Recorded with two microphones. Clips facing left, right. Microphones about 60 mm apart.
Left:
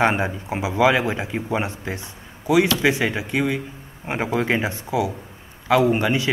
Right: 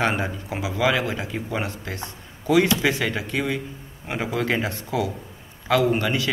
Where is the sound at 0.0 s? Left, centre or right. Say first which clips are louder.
Left 4 dB; left.